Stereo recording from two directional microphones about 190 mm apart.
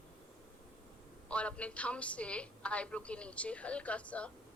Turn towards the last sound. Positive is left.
turn(degrees=5)  # may be behind; listen again after turning